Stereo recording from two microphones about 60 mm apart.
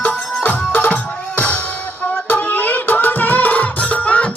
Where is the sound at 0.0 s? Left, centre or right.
Left.